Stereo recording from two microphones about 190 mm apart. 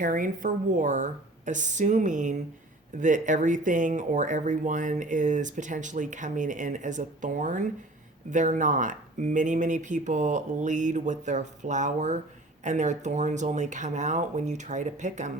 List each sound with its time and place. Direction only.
0.0 s speech: 45° right (ahead or behind)